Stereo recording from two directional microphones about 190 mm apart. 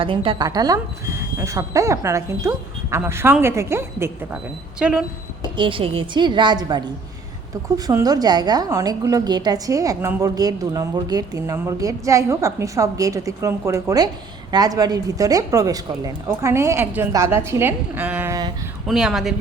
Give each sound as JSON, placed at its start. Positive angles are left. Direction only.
{"t": 0.0, "sound": "a woman's voice", "side_deg": -30}
{"t": 5.4, "sound": "a woman's voice", "side_deg": -25}
{"t": 18.9, "sound": "speech", "side_deg": 0}